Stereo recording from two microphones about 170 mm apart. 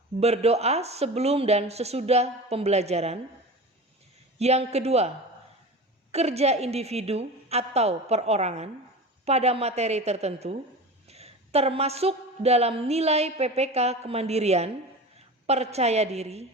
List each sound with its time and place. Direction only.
0.2 s a woman's voice: 40° right (ahead or behind)
4.4 s a woman's voice: 40° right (ahead or behind)